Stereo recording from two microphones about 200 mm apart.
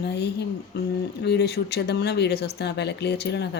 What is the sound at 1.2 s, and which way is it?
Speech, 55° left (ahead or behind).